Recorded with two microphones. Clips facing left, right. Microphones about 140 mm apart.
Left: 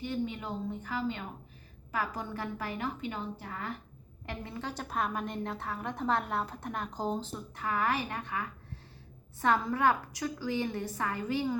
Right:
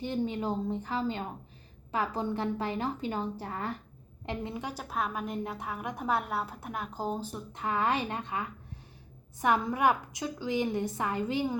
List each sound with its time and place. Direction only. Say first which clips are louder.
0.0 s a woman's voice: right 3 dB; 35° right (ahead or behind)
4.3 s a woman's voice: right 3 dB; 20° right (ahead or behind)